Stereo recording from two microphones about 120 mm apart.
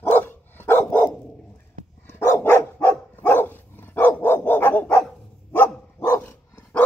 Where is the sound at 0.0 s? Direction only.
20° left (ahead or behind).